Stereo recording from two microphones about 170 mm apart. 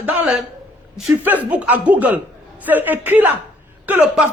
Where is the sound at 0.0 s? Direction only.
5° right (ahead or behind).